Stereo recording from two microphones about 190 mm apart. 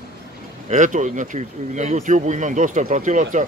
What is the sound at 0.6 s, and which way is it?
Speech, 40° right (ahead or behind).